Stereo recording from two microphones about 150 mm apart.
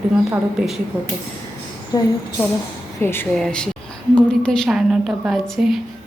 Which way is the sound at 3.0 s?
15° left (ahead or behind).